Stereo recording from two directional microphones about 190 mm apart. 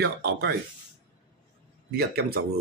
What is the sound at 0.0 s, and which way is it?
Speech, 60° right (ahead or behind).